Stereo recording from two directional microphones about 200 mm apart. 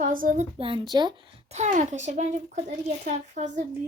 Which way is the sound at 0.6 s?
25° right (ahead or behind).